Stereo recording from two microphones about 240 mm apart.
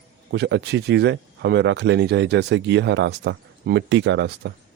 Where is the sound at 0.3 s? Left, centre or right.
Right.